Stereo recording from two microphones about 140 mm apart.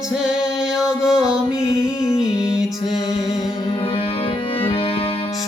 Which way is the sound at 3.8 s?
45° left (ahead or behind).